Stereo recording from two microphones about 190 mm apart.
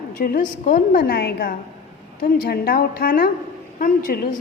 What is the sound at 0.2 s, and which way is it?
A woman's voice, 45° left (ahead or behind).